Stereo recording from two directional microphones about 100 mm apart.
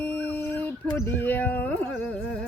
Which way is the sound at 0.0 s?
25° left (ahead or behind).